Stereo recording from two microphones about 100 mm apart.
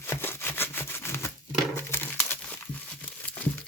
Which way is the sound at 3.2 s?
20° left (ahead or behind).